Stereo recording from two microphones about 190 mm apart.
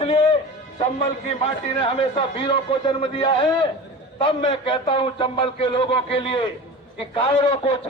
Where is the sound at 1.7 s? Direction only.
30° left (ahead or behind).